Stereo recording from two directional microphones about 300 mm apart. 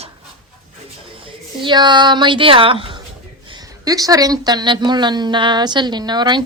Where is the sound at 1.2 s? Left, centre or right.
Centre.